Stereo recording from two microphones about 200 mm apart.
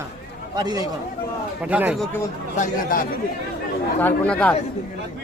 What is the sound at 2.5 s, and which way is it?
Speech, 40° left (ahead or behind).